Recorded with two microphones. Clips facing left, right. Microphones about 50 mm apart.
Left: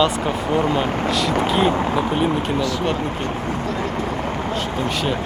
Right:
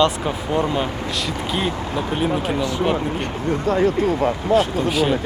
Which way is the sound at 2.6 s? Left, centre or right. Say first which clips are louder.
Even; right.